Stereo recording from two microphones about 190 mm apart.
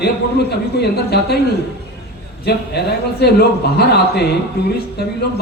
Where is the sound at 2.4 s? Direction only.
60° left (ahead or behind).